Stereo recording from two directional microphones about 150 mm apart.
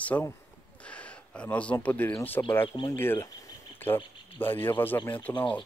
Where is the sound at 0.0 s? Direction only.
10° left (ahead or behind).